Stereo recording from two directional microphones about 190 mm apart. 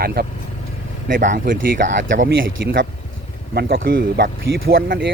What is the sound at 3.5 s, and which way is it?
Speech, 55° right (ahead or behind).